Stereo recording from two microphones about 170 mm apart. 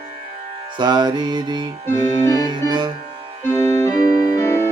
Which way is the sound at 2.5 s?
25° right (ahead or behind).